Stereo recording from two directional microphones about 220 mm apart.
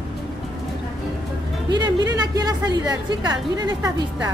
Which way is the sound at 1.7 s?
20° right (ahead or behind).